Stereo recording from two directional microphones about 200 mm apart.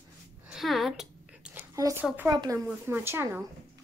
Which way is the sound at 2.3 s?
20° right (ahead or behind).